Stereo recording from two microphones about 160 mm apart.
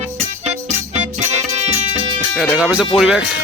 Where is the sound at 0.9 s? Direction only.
45° right (ahead or behind).